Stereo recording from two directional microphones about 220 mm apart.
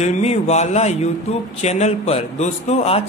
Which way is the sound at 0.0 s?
30° left (ahead or behind).